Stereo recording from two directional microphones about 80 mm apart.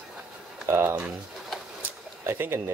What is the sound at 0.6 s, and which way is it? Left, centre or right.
Speech, right.